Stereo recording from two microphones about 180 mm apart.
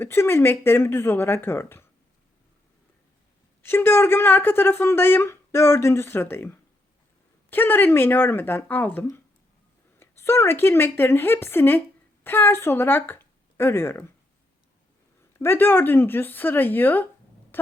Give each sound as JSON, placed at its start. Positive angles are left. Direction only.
{"t": 0.0, "sound": "speech", "side_deg": 10}
{"t": 3.6, "sound": "speech", "side_deg": 10}
{"t": 15.3, "sound": "speech", "side_deg": 10}